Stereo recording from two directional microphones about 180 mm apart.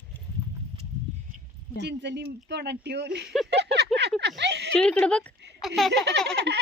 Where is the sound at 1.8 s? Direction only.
70° right (ahead or behind).